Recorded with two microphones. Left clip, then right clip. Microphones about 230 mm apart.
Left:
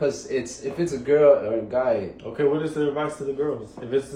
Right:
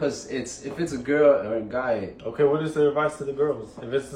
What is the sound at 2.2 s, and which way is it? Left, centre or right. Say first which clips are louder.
Speech: right 2 dB; centre.